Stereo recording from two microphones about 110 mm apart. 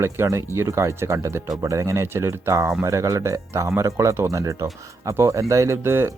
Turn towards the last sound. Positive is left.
turn(degrees=-25)  # may be behind; listen again after turning